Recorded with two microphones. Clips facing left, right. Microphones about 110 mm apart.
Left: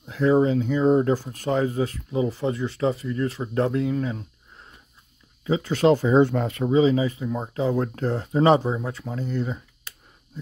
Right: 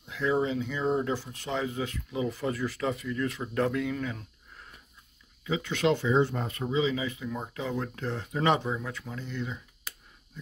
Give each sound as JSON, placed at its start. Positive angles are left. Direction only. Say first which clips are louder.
{"t": 0.0, "sound": "speech", "louder": "left 8 dB", "side_deg": 40}
{"t": 6.2, "sound": "speech", "louder": "left 9 dB", "side_deg": 80}
{"t": 6.7, "sound": "speech", "louder": "left 9 dB", "side_deg": 40}